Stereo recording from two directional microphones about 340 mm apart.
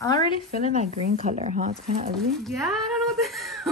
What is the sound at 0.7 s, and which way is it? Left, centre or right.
Speech, centre.